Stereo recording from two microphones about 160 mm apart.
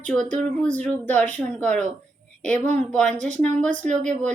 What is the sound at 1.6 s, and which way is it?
Speech, 5° left (ahead or behind).